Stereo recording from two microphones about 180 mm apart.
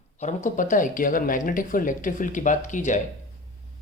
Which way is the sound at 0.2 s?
45° left (ahead or behind).